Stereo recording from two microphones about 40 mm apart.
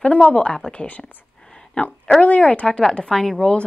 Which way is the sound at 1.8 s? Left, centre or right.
Left.